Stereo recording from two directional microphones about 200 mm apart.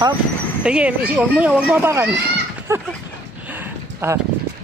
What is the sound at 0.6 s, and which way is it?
Speech, 5° right (ahead or behind).